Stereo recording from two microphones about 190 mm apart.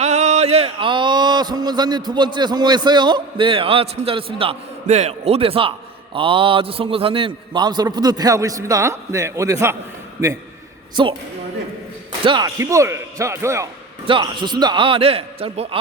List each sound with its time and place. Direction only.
0.0 s a man's voice: 35° right (ahead or behind); by 9.7 s 15° right (ahead or behind)
11.0 s a man's voice: 25° right (ahead or behind)
12.2 s speech: 20° right (ahead or behind)
14.1 s a man's voice: 25° right (ahead or behind)